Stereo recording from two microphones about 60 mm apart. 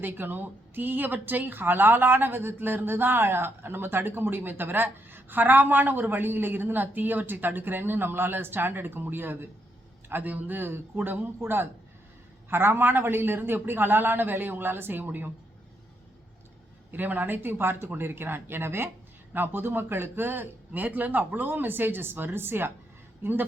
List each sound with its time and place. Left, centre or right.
0.0 s speech: right
16.9 s speech: right